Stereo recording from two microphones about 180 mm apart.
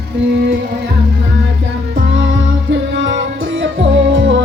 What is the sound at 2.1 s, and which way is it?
Music, 90° right.